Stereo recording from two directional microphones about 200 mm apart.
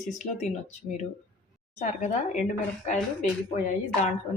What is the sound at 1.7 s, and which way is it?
Speech, 35° left (ahead or behind).